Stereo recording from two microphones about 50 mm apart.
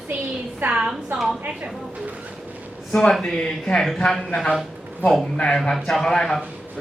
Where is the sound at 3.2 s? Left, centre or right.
Centre.